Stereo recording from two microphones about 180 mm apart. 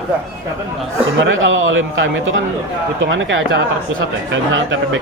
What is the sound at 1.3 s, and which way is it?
A man's voice, 90° right.